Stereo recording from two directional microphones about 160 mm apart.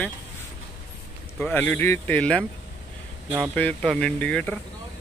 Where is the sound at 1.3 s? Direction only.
10° left (ahead or behind).